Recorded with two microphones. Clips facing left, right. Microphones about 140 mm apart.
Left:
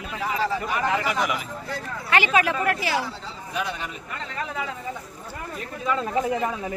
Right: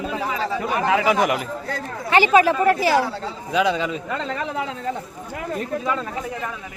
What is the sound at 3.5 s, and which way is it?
Speech, 90° right.